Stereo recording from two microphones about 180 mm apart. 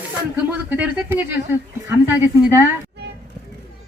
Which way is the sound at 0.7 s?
10° right (ahead or behind).